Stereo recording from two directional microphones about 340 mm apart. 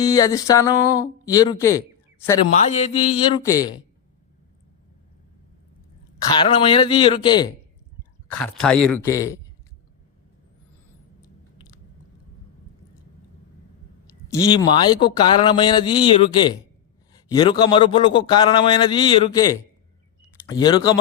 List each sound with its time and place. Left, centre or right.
0.0 s a man's voice: centre
6.3 s a man's voice: centre
8.3 s speech: centre
14.3 s a man's voice: centre